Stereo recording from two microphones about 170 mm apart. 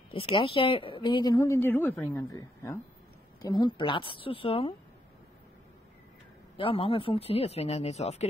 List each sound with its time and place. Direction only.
0.1 s speech: 35° left (ahead or behind)
6.5 s speech: 30° left (ahead or behind)